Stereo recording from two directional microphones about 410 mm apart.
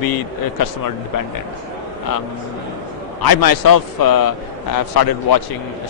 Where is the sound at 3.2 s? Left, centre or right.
Left.